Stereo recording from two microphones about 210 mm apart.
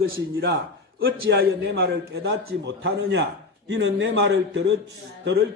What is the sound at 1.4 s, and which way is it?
A man's voice, 50° right (ahead or behind).